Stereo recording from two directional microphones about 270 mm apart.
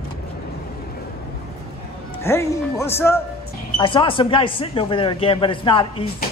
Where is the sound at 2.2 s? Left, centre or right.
Centre.